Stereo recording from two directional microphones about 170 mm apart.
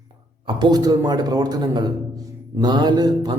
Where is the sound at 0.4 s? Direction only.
25° right (ahead or behind).